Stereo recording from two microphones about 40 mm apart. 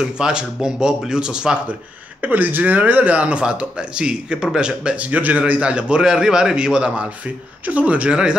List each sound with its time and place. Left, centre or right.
0.0 s speech: centre
2.2 s a man's voice: right
4.9 s a man's voice: right
7.6 s speech: right